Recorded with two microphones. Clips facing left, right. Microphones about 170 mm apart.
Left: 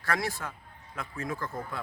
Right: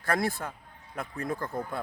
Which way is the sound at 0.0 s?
55° right (ahead or behind).